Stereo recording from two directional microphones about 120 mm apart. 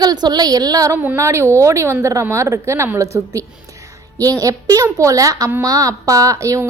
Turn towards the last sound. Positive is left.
turn(degrees=-25)  # may be behind; listen again after turning